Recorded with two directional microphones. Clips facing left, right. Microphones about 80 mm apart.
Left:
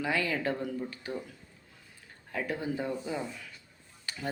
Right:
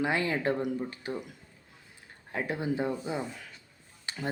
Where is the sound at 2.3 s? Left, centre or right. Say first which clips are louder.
Right 2 dB; right.